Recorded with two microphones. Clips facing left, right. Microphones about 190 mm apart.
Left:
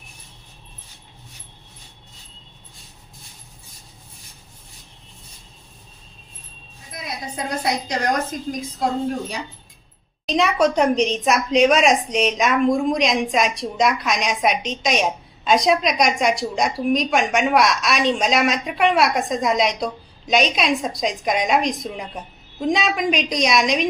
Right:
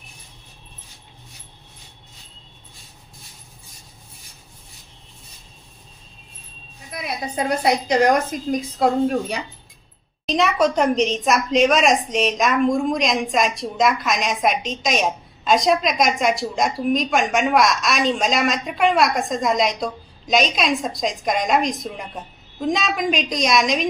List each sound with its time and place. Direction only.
6.9 s a woman's voice: 60° right (ahead or behind)
10.2 s a woman's voice: centre (ahead or behind)